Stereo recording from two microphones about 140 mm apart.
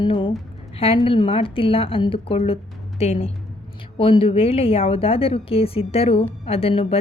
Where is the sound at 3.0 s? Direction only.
50° left (ahead or behind).